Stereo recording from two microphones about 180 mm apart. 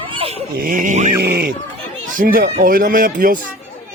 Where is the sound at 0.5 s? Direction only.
50° right (ahead or behind).